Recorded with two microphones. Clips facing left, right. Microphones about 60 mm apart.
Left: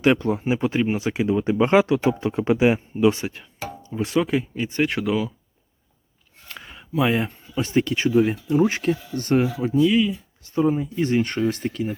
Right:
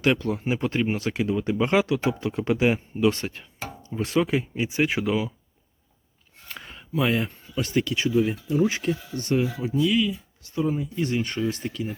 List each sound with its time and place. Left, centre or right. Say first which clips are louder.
0.0 s speech: left 4 dB; left
0.4 s speech: left 2 dB; centre
2.6 s speech: left 3 dB; centre
3.3 s speech: left 3 dB; centre
6.5 s a sound: left 1 dB; centre
7.0 s speech: left 3 dB; centre; by 11.9 s left